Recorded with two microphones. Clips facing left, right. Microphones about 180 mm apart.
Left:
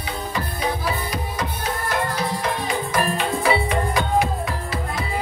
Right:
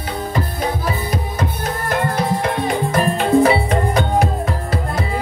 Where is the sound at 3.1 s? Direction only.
40° right (ahead or behind).